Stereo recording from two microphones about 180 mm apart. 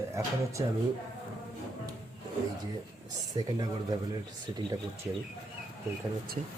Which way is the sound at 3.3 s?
20° right (ahead or behind).